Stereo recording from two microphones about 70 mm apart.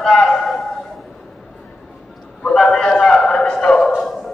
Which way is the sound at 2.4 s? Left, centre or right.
Centre.